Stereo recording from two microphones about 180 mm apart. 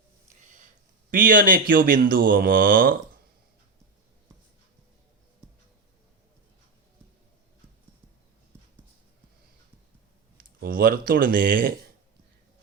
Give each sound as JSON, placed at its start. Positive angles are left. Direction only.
{"t": 1.1, "sound": "speech", "side_deg": -50}
{"t": 10.3, "sound": "speech", "side_deg": -55}